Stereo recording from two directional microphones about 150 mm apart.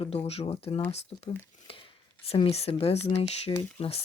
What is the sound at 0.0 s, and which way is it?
Speech, 45° left (ahead or behind).